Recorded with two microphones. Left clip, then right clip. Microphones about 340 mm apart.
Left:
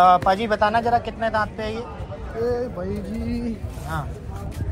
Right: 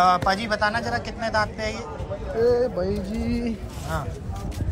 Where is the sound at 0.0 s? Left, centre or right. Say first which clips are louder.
Left 4 dB; centre.